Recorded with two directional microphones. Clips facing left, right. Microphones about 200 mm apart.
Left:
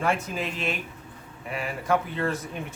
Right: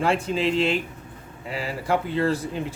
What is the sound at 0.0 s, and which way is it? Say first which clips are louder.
Speech: right 5 dB; 30° right (ahead or behind).